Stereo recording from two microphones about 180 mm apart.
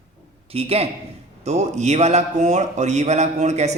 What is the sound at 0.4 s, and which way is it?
A man's voice, 35° right (ahead or behind).